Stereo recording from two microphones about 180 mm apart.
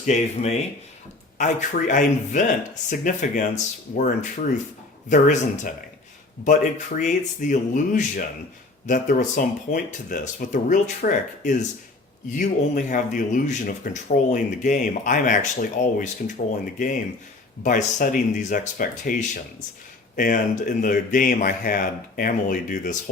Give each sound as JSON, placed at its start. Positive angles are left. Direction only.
{"t": 0.0, "sound": "speech", "side_deg": 40}
{"t": 17.6, "sound": "speech", "side_deg": 45}